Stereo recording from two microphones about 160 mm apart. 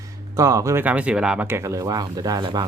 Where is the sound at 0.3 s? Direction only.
20° right (ahead or behind).